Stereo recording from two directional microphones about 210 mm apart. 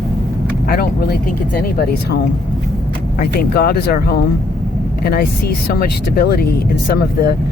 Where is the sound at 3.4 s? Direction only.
50° left (ahead or behind).